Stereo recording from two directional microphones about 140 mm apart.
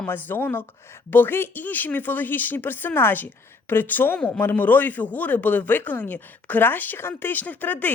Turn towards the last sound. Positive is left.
turn(degrees=10)  # may be behind; listen again after turning